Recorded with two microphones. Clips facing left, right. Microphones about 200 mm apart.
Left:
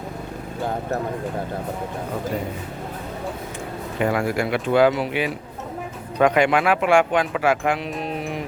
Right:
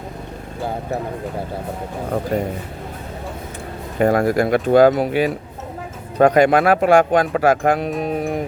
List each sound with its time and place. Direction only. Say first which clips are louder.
3.9 s speech: right 6 dB; 45° right (ahead or behind)